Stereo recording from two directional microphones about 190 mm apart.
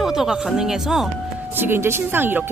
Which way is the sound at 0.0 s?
Centre (ahead or behind).